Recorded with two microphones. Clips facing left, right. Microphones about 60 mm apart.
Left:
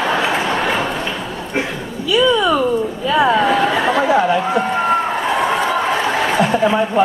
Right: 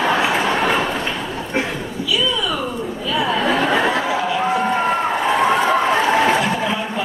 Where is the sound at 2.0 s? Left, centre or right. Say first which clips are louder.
Left 7 dB; left.